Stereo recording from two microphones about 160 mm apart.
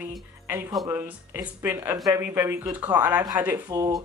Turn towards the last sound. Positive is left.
turn(degrees=-20)  # may be behind; listen again after turning